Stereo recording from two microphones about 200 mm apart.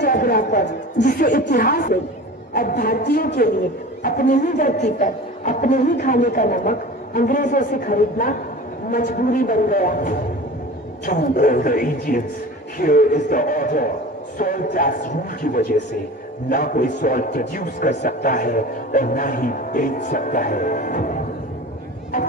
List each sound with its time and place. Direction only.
0.0 s music: 45° left (ahead or behind)
1.0 s a man's voice: 40° left (ahead or behind)